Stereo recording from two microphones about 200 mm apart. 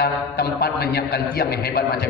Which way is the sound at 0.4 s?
50° left (ahead or behind).